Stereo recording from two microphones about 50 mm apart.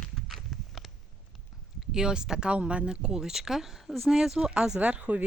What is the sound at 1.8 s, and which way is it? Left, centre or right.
Speech, centre.